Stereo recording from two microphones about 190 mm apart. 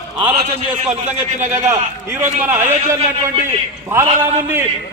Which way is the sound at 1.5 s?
10° right (ahead or behind).